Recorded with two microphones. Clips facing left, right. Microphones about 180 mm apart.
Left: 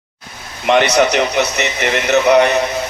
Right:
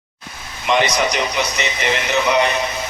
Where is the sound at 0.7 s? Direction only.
65° left (ahead or behind).